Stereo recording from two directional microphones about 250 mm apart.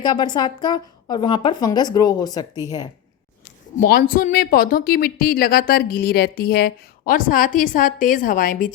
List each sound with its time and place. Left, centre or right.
0.0 s a woman's voice: centre
3.8 s speech: left